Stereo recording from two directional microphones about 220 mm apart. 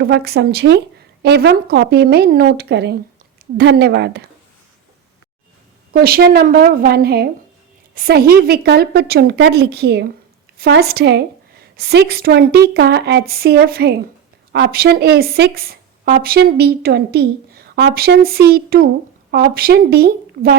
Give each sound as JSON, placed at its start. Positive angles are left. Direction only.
{"t": 0.0, "sound": "a woman's voice", "side_deg": -50}
{"t": 5.9, "sound": "a woman's voice", "side_deg": -45}